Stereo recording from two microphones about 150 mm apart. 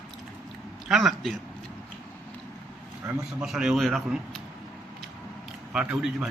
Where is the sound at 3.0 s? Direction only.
20° right (ahead or behind).